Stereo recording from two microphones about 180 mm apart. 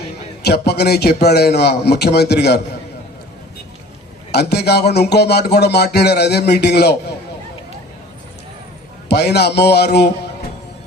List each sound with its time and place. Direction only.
0.4 s speech: 65° left (ahead or behind)
4.3 s speech: 65° left (ahead or behind)
9.0 s speech: 65° left (ahead or behind)